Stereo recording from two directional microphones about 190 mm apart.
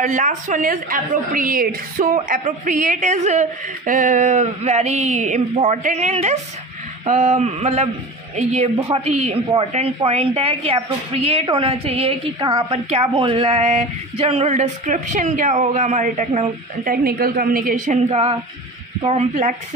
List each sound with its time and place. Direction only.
0.0 s a woman's voice: 40° right (ahead or behind)
8.7 s female singing: 20° right (ahead or behind)
9.0 s a man's voice: 35° right (ahead or behind)
12.7 s a man's voice: 35° right (ahead or behind)
16.8 s a woman's voice: 50° right (ahead or behind)
18.0 s female singing: 30° right (ahead or behind)
19.0 s a man's voice: 40° right (ahead or behind)